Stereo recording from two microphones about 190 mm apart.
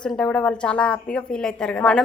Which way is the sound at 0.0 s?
5° left (ahead or behind).